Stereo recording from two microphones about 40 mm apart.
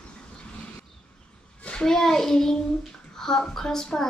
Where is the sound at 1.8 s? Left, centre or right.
Centre.